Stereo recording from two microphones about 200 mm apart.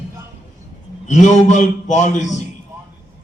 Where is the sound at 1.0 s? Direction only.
35° left (ahead or behind).